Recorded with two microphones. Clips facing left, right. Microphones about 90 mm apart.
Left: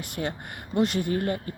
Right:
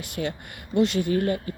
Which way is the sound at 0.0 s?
40° left (ahead or behind).